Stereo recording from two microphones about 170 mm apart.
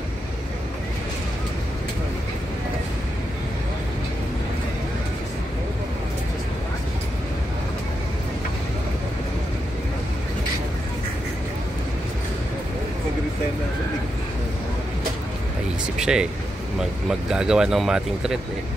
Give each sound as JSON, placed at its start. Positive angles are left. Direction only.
{"t": 16.0, "sound": "speech", "side_deg": -5}